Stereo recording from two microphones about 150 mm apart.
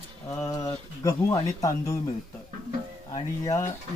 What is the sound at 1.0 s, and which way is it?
Speech, 20° left (ahead or behind).